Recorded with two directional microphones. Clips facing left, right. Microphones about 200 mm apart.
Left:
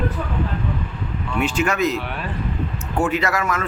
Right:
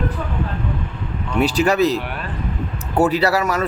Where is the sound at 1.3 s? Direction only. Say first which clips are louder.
Right 4 dB; 35° right (ahead or behind).